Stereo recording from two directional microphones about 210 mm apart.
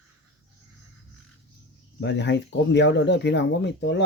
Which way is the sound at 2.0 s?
55° left (ahead or behind).